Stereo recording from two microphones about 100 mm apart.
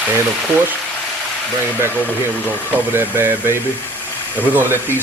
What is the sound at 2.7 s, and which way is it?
Speech, 20° right (ahead or behind).